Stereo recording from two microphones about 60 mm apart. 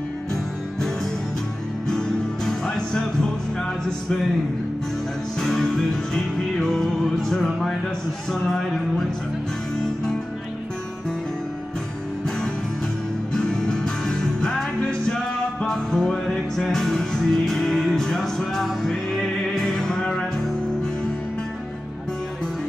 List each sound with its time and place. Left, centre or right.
0.3 s music: centre
5.4 s music: centre
8.3 s speech: centre
13.3 s music: centre